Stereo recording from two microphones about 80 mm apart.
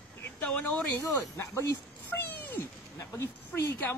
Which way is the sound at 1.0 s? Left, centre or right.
Left.